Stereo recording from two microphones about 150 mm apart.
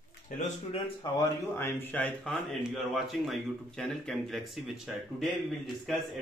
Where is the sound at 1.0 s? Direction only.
30° left (ahead or behind).